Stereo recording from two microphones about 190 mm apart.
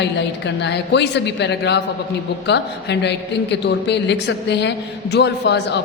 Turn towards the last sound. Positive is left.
turn(degrees=65)  # may be behind; listen again after turning